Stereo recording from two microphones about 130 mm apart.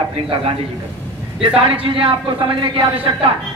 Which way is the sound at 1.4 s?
45° right (ahead or behind).